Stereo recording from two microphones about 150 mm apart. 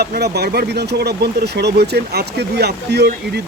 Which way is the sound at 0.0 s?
90° right.